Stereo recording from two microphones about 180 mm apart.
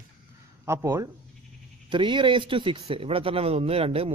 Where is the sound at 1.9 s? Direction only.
25° right (ahead or behind).